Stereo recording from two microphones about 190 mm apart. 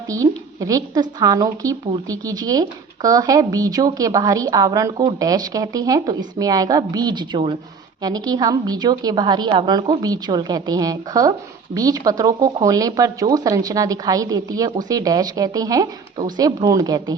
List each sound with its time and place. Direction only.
0.1 s a woman's voice: 20° right (ahead or behind)